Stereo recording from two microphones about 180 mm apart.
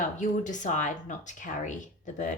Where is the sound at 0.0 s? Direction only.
45° left (ahead or behind).